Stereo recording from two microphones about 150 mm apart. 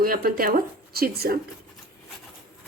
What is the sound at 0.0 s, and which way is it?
Speech, 75° right (ahead or behind).